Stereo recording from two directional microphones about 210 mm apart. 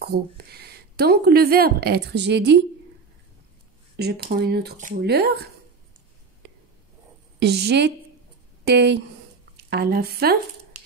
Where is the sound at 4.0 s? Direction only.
45° right (ahead or behind).